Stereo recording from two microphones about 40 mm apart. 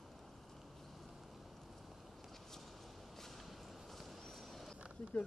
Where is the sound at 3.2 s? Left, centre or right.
Centre.